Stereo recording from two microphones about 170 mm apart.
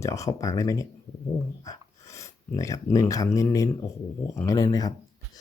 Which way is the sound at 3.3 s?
20° left (ahead or behind).